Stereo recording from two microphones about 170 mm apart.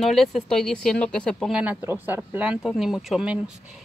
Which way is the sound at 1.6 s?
10° right (ahead or behind).